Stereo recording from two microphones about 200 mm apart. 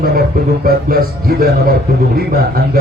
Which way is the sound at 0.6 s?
45° right (ahead or behind).